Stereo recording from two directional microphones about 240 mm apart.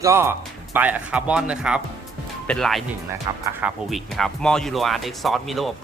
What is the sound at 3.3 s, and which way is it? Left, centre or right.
Speech, centre.